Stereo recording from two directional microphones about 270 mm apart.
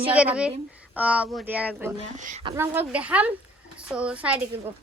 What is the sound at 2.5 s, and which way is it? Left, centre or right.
A woman's voice, centre.